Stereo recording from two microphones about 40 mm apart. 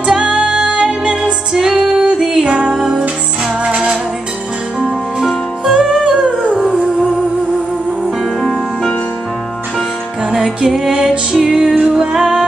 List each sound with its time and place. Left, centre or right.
0.0 s music: right
3.6 s music: right
5.7 s music: centre
6.6 s music: centre
8.4 s music: centre
10.3 s music: centre